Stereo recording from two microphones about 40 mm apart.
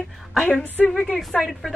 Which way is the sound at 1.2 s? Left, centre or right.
Centre.